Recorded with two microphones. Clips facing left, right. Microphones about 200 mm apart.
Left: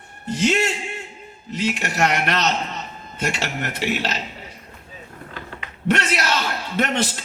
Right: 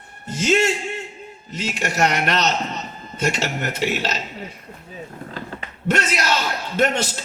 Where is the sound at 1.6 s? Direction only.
40° right (ahead or behind).